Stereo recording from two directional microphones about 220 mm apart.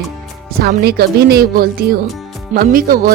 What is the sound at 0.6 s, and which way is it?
Speech, 45° right (ahead or behind).